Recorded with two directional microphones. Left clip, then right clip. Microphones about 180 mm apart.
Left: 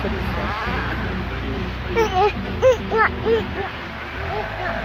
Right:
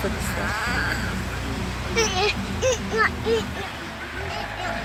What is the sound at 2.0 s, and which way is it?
Speech, 30° left (ahead or behind).